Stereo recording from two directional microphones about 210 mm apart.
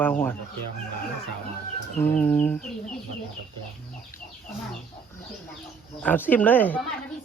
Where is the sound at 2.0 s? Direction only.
5° left (ahead or behind).